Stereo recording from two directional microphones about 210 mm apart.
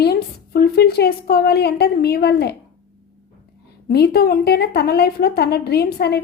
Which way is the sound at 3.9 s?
50° left (ahead or behind).